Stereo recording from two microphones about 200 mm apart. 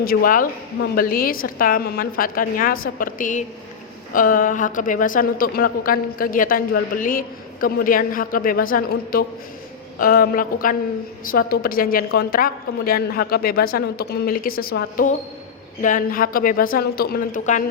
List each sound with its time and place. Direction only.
0.0 s a woman's voice: 50° left (ahead or behind)